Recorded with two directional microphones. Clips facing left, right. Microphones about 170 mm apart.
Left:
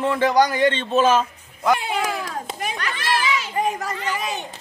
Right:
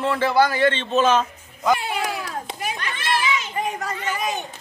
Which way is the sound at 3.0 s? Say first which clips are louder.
Even; 40° left (ahead or behind).